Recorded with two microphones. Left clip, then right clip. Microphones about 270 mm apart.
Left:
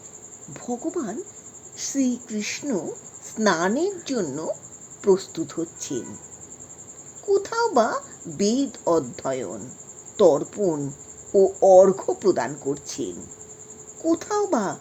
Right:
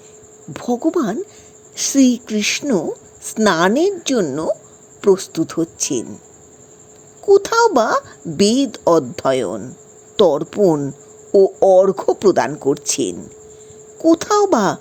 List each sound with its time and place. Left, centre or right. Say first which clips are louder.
0.5 s speech: right 11 dB; right
7.3 s speech: right 10 dB; right